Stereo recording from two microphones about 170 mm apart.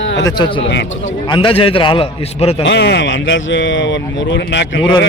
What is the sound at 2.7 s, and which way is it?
Speech, 90° left.